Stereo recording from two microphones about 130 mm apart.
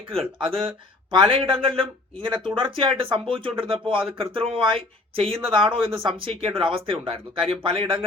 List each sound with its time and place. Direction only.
0.3 s speech: 40° right (ahead or behind)